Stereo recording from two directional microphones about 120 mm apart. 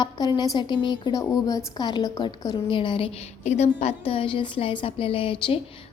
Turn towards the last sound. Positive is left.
turn(degrees=50)  # may be behind; listen again after turning